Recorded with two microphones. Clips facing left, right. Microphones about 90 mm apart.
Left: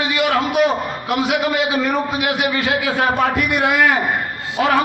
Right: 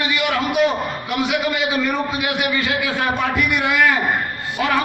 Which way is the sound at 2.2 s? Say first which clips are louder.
Left 2 dB; 50° left (ahead or behind).